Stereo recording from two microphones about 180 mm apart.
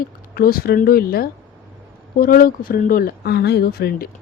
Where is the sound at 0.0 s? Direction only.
55° left (ahead or behind).